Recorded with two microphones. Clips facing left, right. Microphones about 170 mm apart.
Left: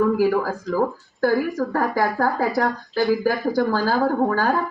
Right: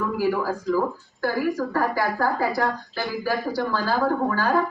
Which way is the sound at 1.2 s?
45° left (ahead or behind).